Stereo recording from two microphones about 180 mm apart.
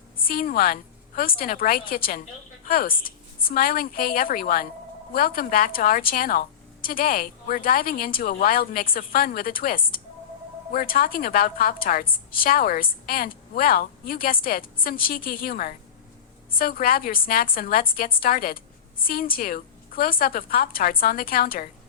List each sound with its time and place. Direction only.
0.3 s a woman's voice: 55° left (ahead or behind)